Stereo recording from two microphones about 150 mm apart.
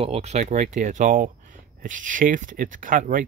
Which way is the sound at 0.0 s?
45° right (ahead or behind).